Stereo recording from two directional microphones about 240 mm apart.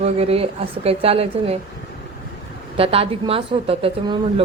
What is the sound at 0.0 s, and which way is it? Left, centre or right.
A woman's voice, right.